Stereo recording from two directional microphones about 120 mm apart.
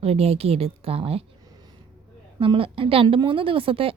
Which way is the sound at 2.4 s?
50° right (ahead or behind).